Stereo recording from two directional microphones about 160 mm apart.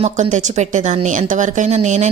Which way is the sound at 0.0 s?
50° right (ahead or behind).